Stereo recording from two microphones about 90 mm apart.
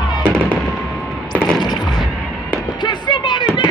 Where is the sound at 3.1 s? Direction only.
55° left (ahead or behind).